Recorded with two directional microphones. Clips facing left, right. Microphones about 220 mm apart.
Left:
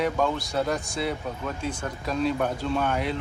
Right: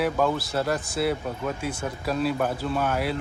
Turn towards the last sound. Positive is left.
turn(degrees=-5)  # may be behind; listen again after turning